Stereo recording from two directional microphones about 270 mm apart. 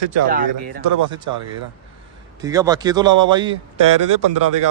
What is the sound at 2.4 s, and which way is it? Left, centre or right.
A man's voice, centre.